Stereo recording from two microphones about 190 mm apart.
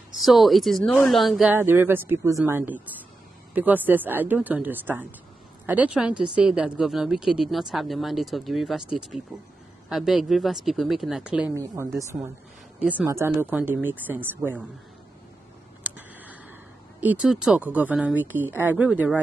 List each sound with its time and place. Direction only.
0.2 s speech: centre (ahead or behind)
15.8 s a sound: 10° right (ahead or behind)
17.0 s speech: 5° right (ahead or behind)